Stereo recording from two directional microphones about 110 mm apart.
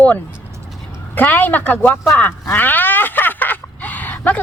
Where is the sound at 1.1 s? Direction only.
15° left (ahead or behind).